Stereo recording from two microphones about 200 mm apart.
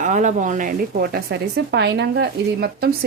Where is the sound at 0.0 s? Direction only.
40° right (ahead or behind).